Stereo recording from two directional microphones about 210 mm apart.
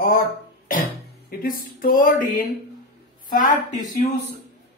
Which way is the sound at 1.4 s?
40° left (ahead or behind).